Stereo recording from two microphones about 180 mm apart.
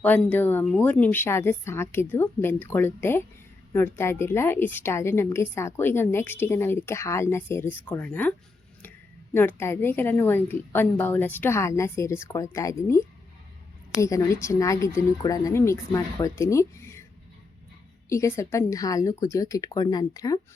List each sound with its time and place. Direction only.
0.0 s a woman's voice: 10° left (ahead or behind)
14.4 s a woman's voice: 15° left (ahead or behind)
18.1 s a woman's voice: 15° left (ahead or behind)